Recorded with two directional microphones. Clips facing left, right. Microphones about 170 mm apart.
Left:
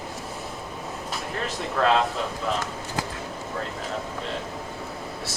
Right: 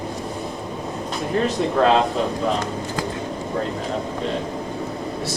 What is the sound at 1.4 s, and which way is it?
Speech, 25° right (ahead or behind).